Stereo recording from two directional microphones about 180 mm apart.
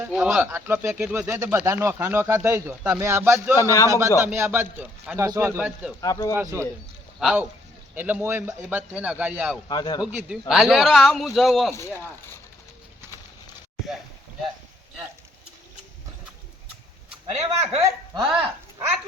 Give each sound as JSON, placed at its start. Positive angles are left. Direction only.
{"t": 0.0, "sound": "a man's voice", "side_deg": -5}
{"t": 0.5, "sound": "speech", "side_deg": -15}
{"t": 3.6, "sound": "a man's voice", "side_deg": 15}
{"t": 3.8, "sound": "speech", "side_deg": -15}
{"t": 6.0, "sound": "speech", "side_deg": 20}
{"t": 6.3, "sound": "speech", "side_deg": -15}
{"t": 7.2, "sound": "a man's voice", "side_deg": 0}
{"t": 9.6, "sound": "speech", "side_deg": 25}
{"t": 10.0, "sound": "a man's voice", "side_deg": -5}
{"t": 17.6, "sound": "speech", "side_deg": -40}